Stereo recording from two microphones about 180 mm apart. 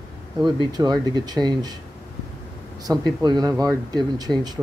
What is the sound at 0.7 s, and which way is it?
Speech, 20° right (ahead or behind).